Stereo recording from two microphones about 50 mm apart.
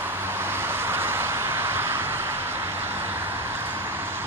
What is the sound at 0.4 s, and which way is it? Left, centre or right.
Vehicle, right.